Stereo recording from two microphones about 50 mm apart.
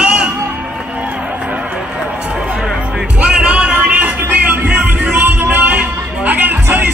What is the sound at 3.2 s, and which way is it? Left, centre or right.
Music, right.